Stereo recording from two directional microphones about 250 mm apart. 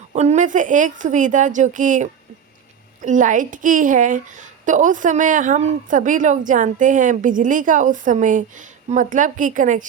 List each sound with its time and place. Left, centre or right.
0.1 s a woman's voice: right